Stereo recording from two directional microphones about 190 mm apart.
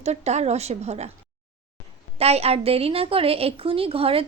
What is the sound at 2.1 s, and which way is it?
A woman's voice, 35° right (ahead or behind).